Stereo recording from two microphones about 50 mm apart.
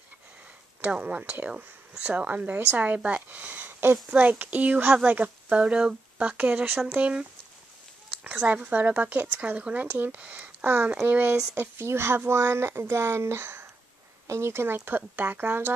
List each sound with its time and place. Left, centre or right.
0.7 s a woman's voice: right
6.3 s a woman's voice: right
7.0 s speech: right
9.9 s a woman's voice: right
11.8 s speech: right
14.2 s a woman's voice: right